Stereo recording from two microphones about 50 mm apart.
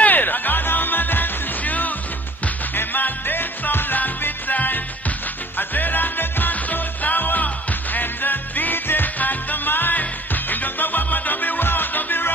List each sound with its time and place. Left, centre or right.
0.0 s music: left